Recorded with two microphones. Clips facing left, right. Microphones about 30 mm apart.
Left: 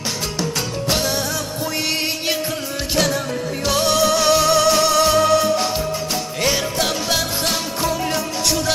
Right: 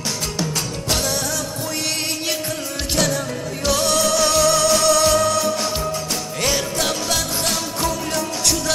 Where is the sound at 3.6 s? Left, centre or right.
Centre.